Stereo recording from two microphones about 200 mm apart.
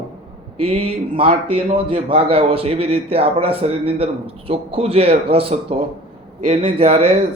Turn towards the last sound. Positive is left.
turn(degrees=-30)  # may be behind; listen again after turning